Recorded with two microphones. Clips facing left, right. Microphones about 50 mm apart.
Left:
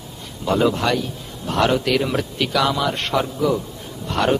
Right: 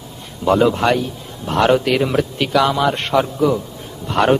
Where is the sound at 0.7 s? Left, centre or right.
Right.